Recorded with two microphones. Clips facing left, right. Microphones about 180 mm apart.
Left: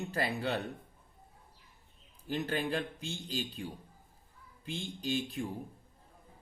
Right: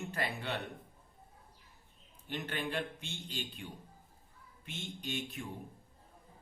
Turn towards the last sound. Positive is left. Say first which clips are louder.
# left 6 dB
turn(degrees=35)  # may be behind; listen again after turning